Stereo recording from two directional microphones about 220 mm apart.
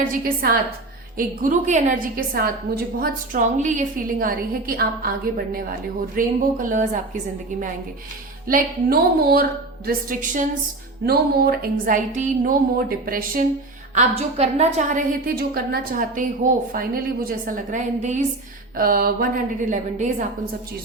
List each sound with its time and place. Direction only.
0.0 s a woman's voice: 40° right (ahead or behind)
2.7 s a sound: 45° right (ahead or behind)
3.0 s a woman's voice: 35° right (ahead or behind)
8.4 s a woman's voice: 40° right (ahead or behind)
13.9 s a woman's voice: 30° right (ahead or behind)
18.8 s a sound: 40° right (ahead or behind)
19.7 s a woman's voice: 35° right (ahead or behind)